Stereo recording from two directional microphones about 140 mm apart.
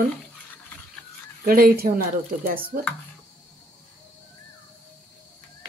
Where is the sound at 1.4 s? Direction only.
90° right.